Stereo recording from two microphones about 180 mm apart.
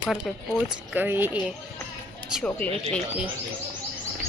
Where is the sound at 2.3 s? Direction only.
5° left (ahead or behind).